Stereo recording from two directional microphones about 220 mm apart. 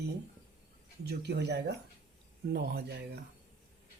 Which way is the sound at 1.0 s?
50° right (ahead or behind).